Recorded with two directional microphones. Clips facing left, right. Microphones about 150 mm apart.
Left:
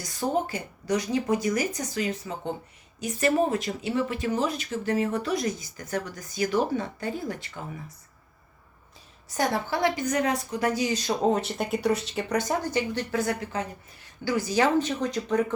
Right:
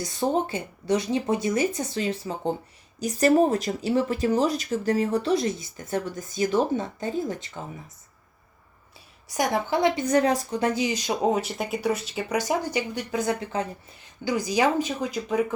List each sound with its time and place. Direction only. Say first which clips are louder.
0.0 s speech: right 2 dB; 25° right (ahead or behind)
9.3 s speech: right 2 dB; 15° right (ahead or behind)
11.3 s speech: even; centre (ahead or behind)